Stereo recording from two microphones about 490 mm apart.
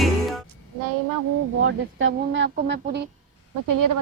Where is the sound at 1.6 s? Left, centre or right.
Right.